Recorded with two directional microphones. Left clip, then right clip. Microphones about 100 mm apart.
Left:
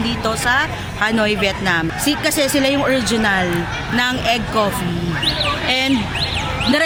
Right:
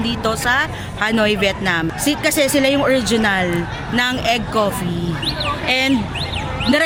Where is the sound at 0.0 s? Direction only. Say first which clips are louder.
Even; 15° right (ahead or behind).